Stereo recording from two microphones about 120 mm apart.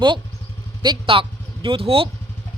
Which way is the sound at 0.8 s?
45° right (ahead or behind).